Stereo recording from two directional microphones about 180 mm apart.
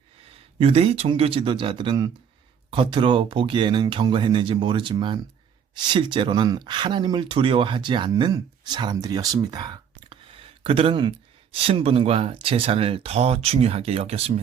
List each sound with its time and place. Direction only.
0.6 s speech: 35° right (ahead or behind)